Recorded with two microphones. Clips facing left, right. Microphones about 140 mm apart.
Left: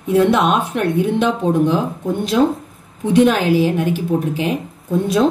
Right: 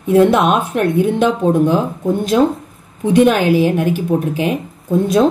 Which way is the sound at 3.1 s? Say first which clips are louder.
Right 2 dB; 60° right (ahead or behind).